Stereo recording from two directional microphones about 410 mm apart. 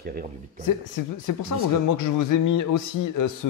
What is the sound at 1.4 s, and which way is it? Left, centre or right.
A man's voice, left.